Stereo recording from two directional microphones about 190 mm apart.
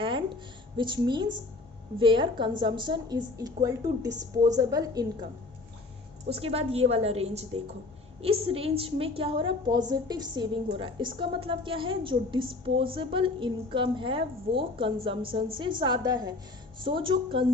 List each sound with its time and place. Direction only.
0.0 s a sound: 25° right (ahead or behind)
0.8 s a woman's voice: 25° right (ahead or behind)
6.3 s a woman's voice: 30° right (ahead or behind)